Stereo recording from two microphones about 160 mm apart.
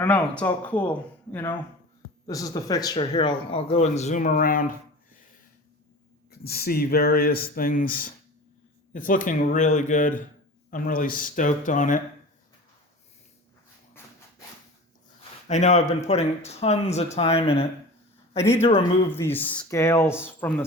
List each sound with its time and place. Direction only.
0.0 s speech: 10° left (ahead or behind); by 4.7 s 60° left (ahead or behind)
6.4 s speech: 75° left (ahead or behind); by 12.0 s 55° left (ahead or behind)
15.4 s speech: 45° left (ahead or behind)
19.1 s speech: 15° left (ahead or behind)